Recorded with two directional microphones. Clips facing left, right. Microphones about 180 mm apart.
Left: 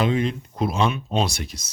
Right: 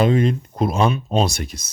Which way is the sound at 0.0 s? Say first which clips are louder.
Right 5 dB; 45° right (ahead or behind).